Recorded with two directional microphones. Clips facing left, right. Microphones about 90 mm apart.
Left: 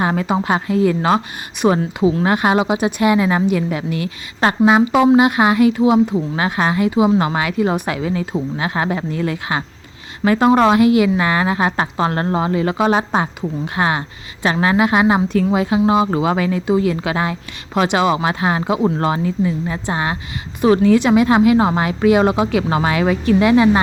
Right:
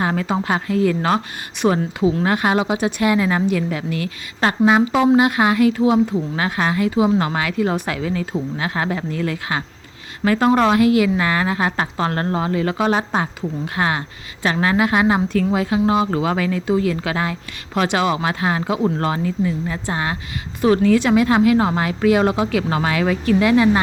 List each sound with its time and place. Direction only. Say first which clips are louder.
0.0 s a woman's voice: left 2 dB; 20° left (ahead or behind)
6.1 s a woman's voice: left 2 dB; 25° left (ahead or behind)